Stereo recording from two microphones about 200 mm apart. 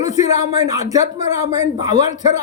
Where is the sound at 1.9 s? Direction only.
35° left (ahead or behind).